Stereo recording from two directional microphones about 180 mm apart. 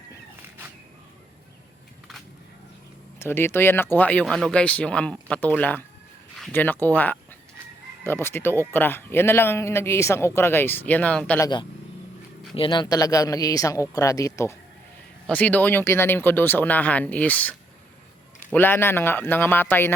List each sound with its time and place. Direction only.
3.2 s speech: 15° left (ahead or behind)
11.3 s speech: 20° left (ahead or behind)
18.5 s speech: 10° left (ahead or behind)